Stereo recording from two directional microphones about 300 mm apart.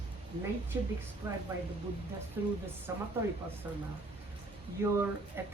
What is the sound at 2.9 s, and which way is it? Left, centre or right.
Speech, centre.